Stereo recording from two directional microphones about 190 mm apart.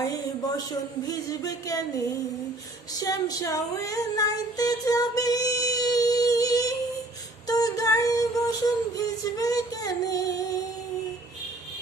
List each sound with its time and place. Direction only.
0.0 s speech: 20° left (ahead or behind)
3.0 s female singing: 20° left (ahead or behind)